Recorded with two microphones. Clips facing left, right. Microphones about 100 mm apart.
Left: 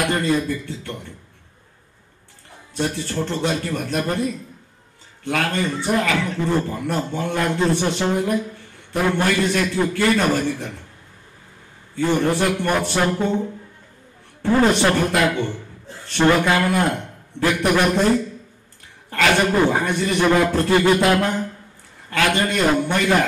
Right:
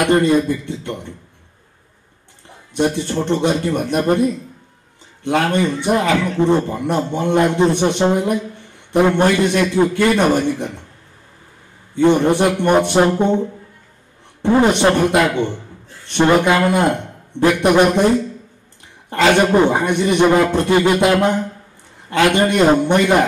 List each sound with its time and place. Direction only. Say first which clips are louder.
0.0 s a man's voice: right 6 dB; 20° right (ahead or behind)
2.7 s a man's voice: right 6 dB; 20° right (ahead or behind)
11.9 s a man's voice: right 6 dB; 20° right (ahead or behind)
14.4 s a man's voice: right 3 dB; 20° right (ahead or behind)